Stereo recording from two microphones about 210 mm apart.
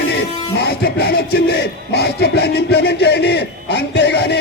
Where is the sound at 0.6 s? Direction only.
50° left (ahead or behind).